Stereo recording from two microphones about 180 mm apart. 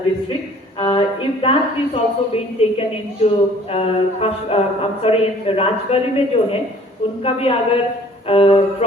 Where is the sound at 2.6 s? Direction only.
35° left (ahead or behind).